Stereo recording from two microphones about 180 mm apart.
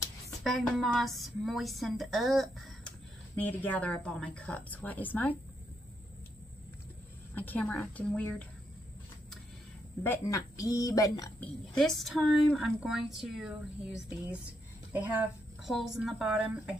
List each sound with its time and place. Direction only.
0.4 s a woman's voice: centre (ahead or behind)
7.3 s a woman's voice: 10° left (ahead or behind)
10.0 s a woman's voice: 20° left (ahead or behind)
11.4 s a woman's voice: 5° left (ahead or behind)